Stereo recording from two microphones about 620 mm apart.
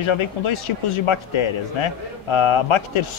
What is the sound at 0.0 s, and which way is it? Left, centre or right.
Speech, left.